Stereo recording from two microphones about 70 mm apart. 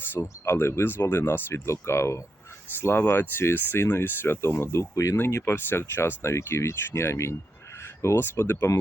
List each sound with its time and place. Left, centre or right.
0.1 s speech: left
5.1 s speech: left